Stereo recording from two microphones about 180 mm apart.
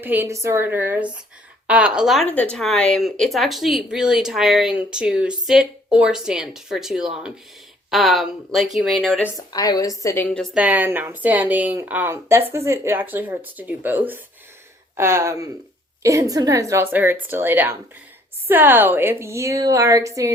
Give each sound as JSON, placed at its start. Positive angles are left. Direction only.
{"t": 0.0, "sound": "a woman's voice", "side_deg": -10}
{"t": 9.5, "sound": "a woman's voice", "side_deg": 20}
{"t": 10.5, "sound": "a woman's voice", "side_deg": -10}